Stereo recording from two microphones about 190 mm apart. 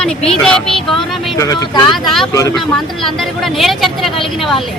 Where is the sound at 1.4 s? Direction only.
20° left (ahead or behind).